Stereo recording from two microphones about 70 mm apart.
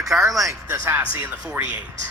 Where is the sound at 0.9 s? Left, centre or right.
Right.